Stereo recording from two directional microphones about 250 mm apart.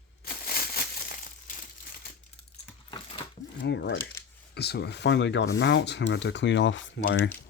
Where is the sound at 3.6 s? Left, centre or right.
Left.